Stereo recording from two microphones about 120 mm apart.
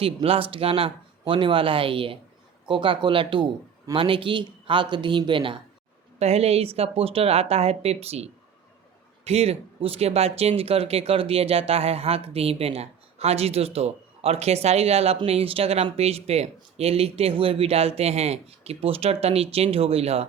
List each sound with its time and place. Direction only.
0.0 s speech: 50° right (ahead or behind)
6.1 s speech: 60° right (ahead or behind)